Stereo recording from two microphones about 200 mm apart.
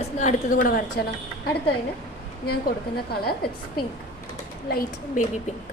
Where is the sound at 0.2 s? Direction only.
40° left (ahead or behind).